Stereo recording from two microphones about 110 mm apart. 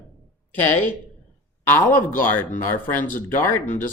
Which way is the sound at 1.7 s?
15° left (ahead or behind).